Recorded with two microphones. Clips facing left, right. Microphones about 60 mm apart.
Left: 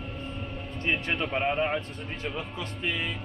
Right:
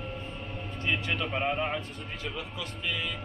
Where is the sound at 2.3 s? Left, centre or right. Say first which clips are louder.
Left 2 dB; left.